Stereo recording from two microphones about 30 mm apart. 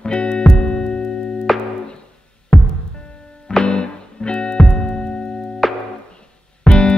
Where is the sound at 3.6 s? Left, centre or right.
Left.